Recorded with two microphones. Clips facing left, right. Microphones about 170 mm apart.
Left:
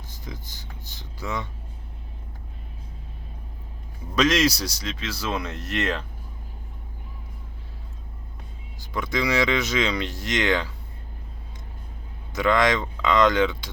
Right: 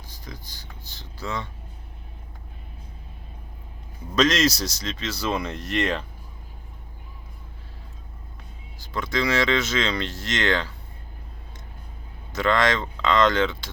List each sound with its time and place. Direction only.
0.3 s speech: 20° left (ahead or behind)
4.1 s speech: 10° left (ahead or behind)
8.9 s speech: 15° left (ahead or behind)
12.3 s speech: 15° left (ahead or behind)